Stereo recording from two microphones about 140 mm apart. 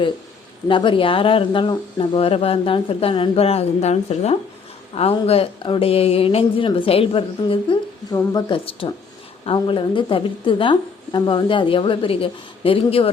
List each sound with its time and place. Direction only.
0.7 s speech: 35° left (ahead or behind)
8.1 s speech: 30° left (ahead or behind)